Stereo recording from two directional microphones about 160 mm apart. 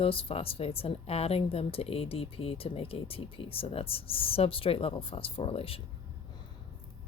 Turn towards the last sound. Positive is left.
turn(degrees=35)  # may be behind; listen again after turning